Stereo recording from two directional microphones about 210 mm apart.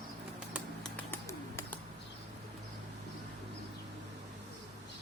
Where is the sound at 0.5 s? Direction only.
5° left (ahead or behind).